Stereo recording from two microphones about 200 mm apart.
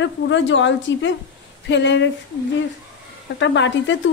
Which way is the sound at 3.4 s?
65° left (ahead or behind).